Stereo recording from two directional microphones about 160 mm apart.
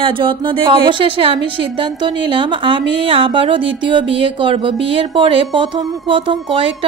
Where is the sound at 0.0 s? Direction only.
30° right (ahead or behind).